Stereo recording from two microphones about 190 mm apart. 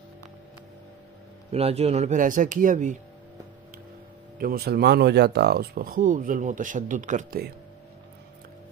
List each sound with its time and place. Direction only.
1.5 s speech: 30° right (ahead or behind)
4.4 s speech: 55° right (ahead or behind)